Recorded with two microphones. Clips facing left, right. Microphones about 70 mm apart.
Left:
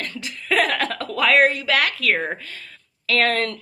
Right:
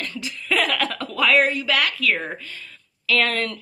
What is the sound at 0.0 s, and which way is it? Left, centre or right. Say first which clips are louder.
Speech: even; left.